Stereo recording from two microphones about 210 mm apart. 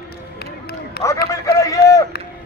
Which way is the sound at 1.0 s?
50° left (ahead or behind).